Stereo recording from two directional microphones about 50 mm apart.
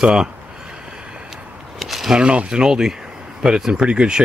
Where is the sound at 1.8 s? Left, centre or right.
Centre.